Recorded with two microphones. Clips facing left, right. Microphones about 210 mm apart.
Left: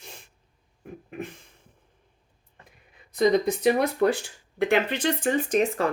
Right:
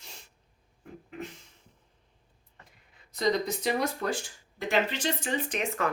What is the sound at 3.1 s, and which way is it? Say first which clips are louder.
Speech: left 7 dB; 55° left (ahead or behind).